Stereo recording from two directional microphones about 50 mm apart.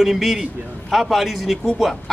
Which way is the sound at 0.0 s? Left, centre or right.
Centre.